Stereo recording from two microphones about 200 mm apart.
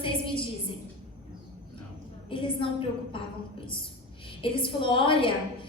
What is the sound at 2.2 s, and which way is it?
Speech, 25° left (ahead or behind).